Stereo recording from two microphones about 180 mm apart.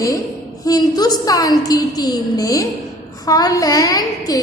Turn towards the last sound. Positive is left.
turn(degrees=20)  # may be behind; listen again after turning